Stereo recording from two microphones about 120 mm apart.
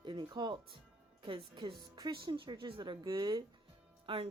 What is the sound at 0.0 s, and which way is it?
Speech, 40° right (ahead or behind).